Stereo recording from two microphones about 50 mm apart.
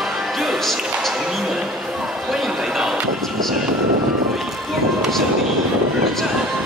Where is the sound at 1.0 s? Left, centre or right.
Centre.